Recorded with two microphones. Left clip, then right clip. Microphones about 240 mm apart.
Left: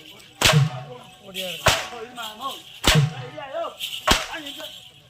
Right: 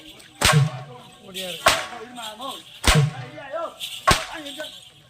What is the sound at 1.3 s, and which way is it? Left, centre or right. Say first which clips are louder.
Music: left 1 dB; centre.